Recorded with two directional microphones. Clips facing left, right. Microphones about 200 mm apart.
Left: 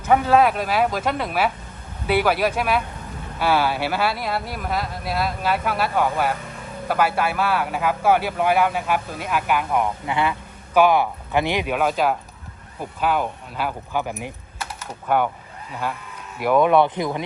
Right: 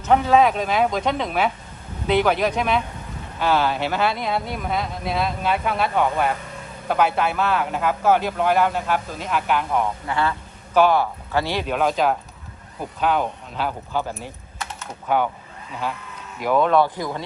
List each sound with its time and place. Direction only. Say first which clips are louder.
0.0 s a man's voice: even; 10° left (ahead or behind)
16.4 s speech: left 2 dB; 10° left (ahead or behind)